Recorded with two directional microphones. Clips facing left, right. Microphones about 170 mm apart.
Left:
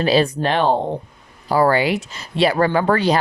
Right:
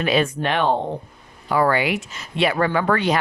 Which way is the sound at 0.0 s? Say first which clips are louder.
Left 3 dB; 35° left (ahead or behind).